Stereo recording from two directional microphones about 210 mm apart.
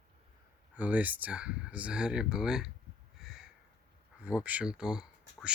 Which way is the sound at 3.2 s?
Centre (ahead or behind).